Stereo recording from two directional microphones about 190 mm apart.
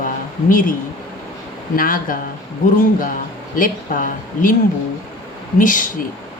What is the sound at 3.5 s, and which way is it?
A woman's voice, 45° left (ahead or behind).